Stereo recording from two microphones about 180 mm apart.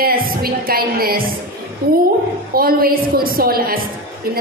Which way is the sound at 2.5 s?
55° right (ahead or behind).